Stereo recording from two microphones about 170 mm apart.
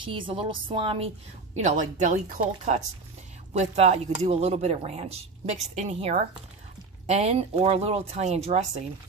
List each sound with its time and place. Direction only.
0.0 s a woman's voice: 30° right (ahead or behind)
1.5 s speech: 45° right (ahead or behind)